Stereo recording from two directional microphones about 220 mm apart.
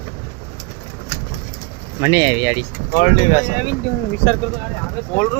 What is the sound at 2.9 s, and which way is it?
Speech, 40° left (ahead or behind).